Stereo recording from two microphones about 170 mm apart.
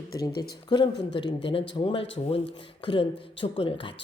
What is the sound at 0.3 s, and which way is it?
Speech, 65° left (ahead or behind).